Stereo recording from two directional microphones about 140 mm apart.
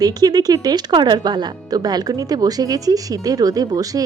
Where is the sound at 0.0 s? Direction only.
25° right (ahead or behind).